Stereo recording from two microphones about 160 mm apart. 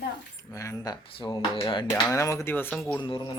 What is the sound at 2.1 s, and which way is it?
Speech, 20° left (ahead or behind).